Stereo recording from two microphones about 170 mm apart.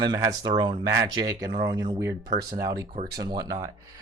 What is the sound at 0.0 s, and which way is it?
Speech, 25° right (ahead or behind).